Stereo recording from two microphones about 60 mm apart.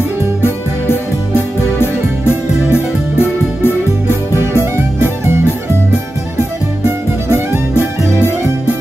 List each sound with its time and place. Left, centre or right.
0.4 s music: left
4.7 s music: right
7.2 s music: right